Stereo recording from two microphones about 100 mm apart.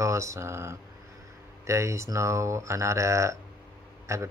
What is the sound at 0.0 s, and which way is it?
Speech, 30° right (ahead or behind).